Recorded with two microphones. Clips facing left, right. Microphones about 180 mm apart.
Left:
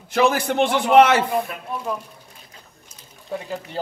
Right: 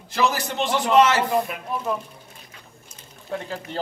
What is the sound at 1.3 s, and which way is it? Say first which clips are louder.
Speech: right 1 dB; 5° right (ahead or behind).